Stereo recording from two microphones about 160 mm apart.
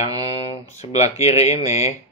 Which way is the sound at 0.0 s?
40° left (ahead or behind).